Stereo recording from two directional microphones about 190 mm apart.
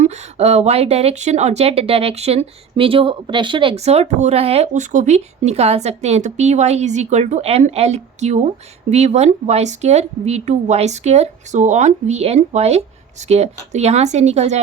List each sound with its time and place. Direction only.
0.0 s speech: 35° right (ahead or behind)